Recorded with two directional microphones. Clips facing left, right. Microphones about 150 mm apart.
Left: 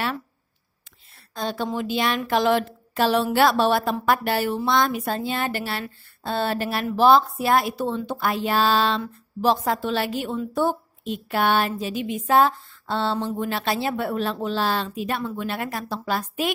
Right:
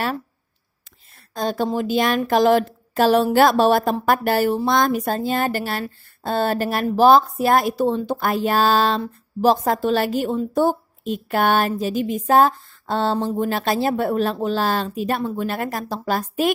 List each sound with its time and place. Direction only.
1.3 s speech: 45° right (ahead or behind)